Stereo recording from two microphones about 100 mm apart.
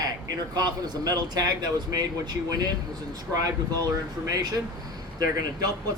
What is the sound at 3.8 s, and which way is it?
Speech, 40° right (ahead or behind).